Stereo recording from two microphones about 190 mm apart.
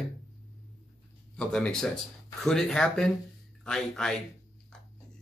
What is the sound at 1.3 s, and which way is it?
Speech, 5° left (ahead or behind).